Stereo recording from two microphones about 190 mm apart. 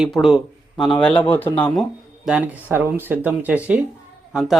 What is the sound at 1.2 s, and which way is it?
Speech, 10° left (ahead or behind).